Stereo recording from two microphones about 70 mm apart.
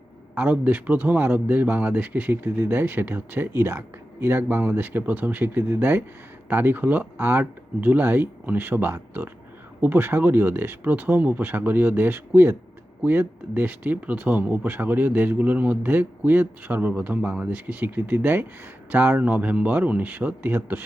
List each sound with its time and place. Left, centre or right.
0.3 s a man's voice: right